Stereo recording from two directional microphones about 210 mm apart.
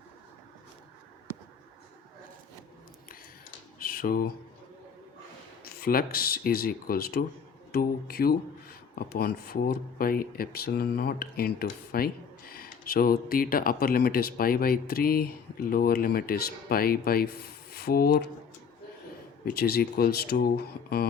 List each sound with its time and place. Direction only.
3.8 s computer keyboard: 45° left (ahead or behind)
5.6 s speech: 45° left (ahead or behind)
19.5 s speech: 45° left (ahead or behind)